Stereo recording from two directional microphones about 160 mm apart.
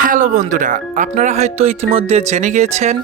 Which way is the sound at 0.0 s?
55° right (ahead or behind).